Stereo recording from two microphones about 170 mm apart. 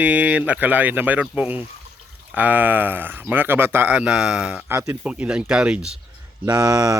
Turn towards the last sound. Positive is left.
turn(degrees=-20)  # may be behind; listen again after turning